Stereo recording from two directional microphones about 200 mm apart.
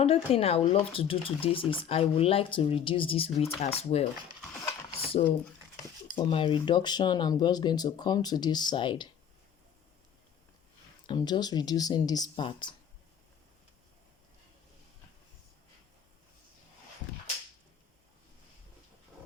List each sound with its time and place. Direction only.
0.0 s speech: 30° left (ahead or behind)
5.7 s speech: 25° left (ahead or behind)
11.0 s speech: 20° left (ahead or behind)